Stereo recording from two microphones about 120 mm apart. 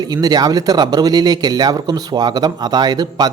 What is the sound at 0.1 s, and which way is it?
A man's voice, 35° right (ahead or behind).